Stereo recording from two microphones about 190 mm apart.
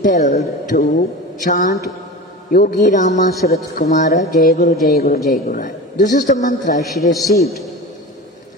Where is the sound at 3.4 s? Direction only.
55° left (ahead or behind).